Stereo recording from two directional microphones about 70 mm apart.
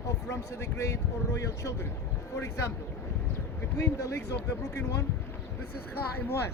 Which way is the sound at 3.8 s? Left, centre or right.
Left.